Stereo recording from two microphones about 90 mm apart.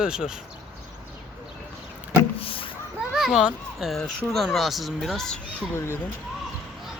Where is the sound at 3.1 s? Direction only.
5° right (ahead or behind).